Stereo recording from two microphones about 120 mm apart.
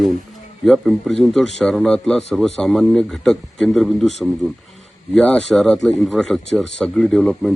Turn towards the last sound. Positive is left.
turn(degrees=0)  # may be behind; listen again after turning